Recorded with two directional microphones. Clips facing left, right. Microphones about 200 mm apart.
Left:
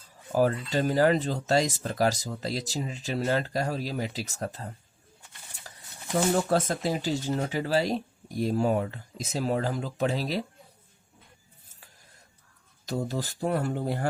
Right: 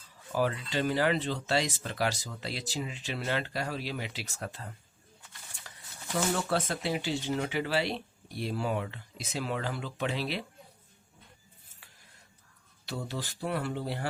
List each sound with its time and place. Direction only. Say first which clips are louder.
0.3 s speech: left 5 dB; 40° left (ahead or behind)
5.7 s a sound: left 6 dB; 40° left (ahead or behind)
6.1 s speech: left 5 dB; 40° left (ahead or behind)
12.8 s speech: left 6 dB; 40° left (ahead or behind)